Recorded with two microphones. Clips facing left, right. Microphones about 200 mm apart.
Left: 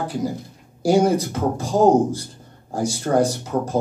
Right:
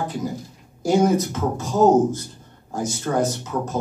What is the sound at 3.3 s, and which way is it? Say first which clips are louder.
Speech: left 3 dB; 35° left (ahead or behind).